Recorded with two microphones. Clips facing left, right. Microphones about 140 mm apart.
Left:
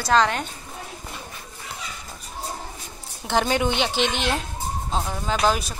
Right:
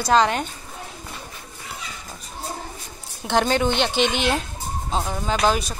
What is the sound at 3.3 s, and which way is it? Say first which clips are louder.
Speech: right 2 dB; 5° left (ahead or behind).